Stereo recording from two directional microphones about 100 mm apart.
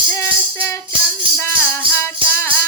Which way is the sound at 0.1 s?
25° left (ahead or behind).